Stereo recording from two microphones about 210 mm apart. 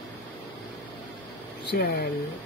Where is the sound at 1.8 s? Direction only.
50° left (ahead or behind).